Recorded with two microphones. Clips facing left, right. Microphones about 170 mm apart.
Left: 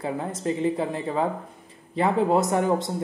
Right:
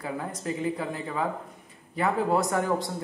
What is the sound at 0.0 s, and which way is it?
Speech, 25° left (ahead or behind).